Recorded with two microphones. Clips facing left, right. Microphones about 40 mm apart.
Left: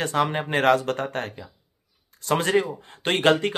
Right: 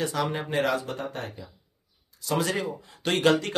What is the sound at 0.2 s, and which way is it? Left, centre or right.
Speech, left.